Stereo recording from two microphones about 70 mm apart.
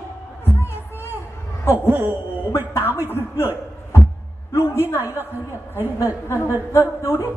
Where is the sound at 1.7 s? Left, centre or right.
Right.